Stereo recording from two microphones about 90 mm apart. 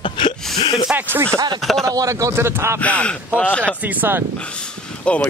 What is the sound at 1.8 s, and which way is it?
Speech, 40° right (ahead or behind).